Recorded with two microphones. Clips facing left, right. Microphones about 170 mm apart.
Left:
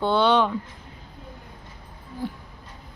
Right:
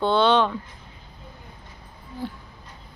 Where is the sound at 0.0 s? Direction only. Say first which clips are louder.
Right 1 dB; 10° left (ahead or behind).